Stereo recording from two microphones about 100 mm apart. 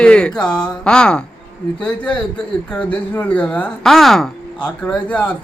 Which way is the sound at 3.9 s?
Centre (ahead or behind).